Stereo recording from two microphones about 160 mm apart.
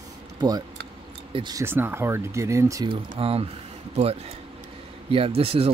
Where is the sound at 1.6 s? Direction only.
15° right (ahead or behind).